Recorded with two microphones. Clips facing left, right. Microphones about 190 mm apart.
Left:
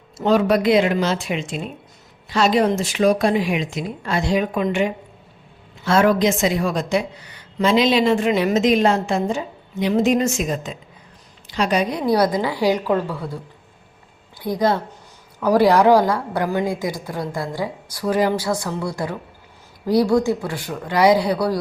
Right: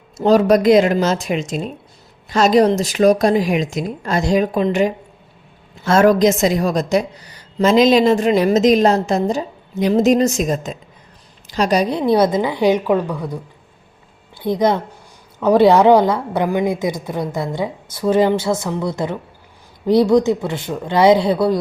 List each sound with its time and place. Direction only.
0.2 s a woman's voice: 40° right (ahead or behind); by 21.6 s 25° right (ahead or behind)